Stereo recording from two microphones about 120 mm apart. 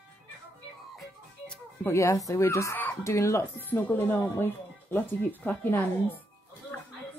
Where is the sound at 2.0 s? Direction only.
25° left (ahead or behind).